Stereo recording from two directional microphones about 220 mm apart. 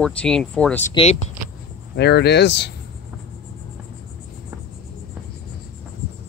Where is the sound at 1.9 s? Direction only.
50° left (ahead or behind).